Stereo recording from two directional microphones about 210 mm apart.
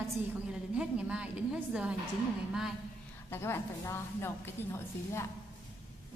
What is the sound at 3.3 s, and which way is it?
A woman's voice, 10° left (ahead or behind).